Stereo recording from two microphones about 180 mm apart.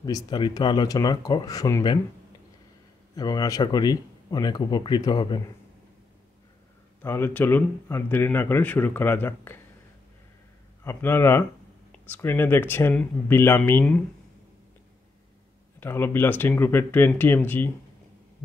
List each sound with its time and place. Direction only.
0.0 s a man's voice: 25° left (ahead or behind)
3.2 s a man's voice: 20° left (ahead or behind)
7.0 s speech: 15° left (ahead or behind)
10.8 s speech: 15° left (ahead or behind)
15.8 s speech: 10° left (ahead or behind)